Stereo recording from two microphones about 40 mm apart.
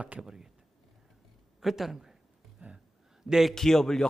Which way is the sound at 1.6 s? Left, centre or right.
Centre.